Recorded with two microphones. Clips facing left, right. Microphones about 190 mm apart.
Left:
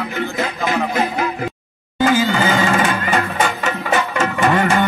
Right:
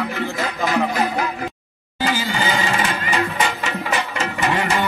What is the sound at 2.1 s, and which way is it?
Music, 50° left (ahead or behind).